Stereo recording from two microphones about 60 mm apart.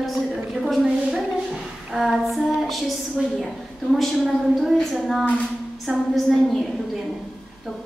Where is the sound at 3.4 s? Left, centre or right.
Centre.